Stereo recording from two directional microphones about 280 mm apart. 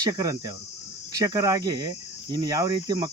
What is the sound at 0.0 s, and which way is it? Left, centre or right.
Cricket, centre.